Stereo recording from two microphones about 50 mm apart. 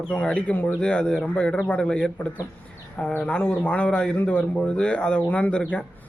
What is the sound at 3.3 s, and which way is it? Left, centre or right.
Speech, left.